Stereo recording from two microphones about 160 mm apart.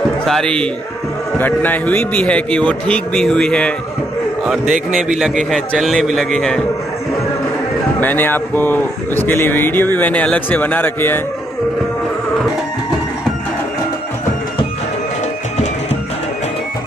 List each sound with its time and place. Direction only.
0.2 s a man's voice: 5° left (ahead or behind)
4.6 s a man's voice: 55° right (ahead or behind)
5.5 s a man's voice: centre (ahead or behind)
8.0 s speech: 10° left (ahead or behind)